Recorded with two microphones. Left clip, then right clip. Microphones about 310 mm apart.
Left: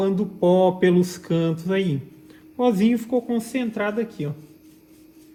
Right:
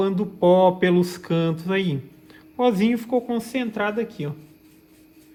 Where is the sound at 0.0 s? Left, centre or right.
Right.